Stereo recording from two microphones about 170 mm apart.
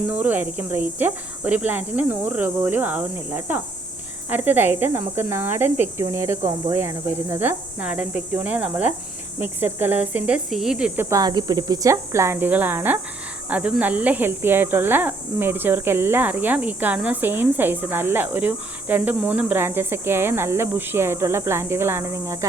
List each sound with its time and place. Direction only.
0.0 s speech: 10° right (ahead or behind)